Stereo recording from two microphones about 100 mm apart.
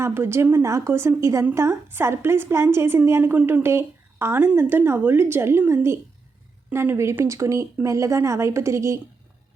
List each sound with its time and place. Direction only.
0.0 s a woman's voice: 25° right (ahead or behind)